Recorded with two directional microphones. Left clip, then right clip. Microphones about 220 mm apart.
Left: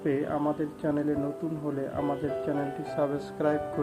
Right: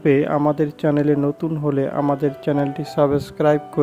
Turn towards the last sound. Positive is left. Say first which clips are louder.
# right 11 dB
turn(degrees=-35)  # may be behind; listen again after turning